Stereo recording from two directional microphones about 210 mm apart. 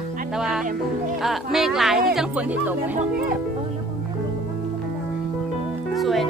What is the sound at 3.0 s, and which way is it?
Speech, 40° right (ahead or behind).